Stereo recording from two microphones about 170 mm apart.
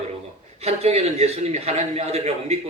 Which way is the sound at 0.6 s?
40° right (ahead or behind).